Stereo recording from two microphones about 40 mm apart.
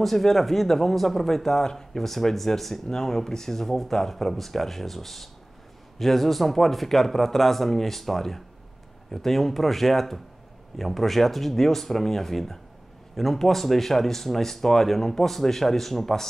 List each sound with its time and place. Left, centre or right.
0.0 s speech: centre